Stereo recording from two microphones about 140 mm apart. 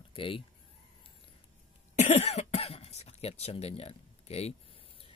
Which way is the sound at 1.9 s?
50° left (ahead or behind).